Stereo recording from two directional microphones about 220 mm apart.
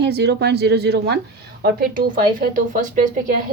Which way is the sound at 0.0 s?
50° right (ahead or behind).